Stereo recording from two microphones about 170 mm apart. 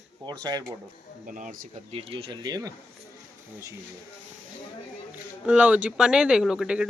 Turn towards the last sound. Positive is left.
turn(degrees=-5)  # may be behind; listen again after turning